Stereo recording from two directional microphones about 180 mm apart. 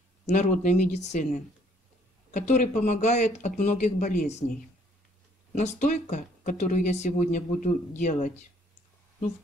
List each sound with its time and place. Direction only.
0.3 s speech: 40° left (ahead or behind)